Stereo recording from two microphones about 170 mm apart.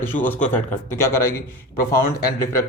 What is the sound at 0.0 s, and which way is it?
Speech, 10° left (ahead or behind).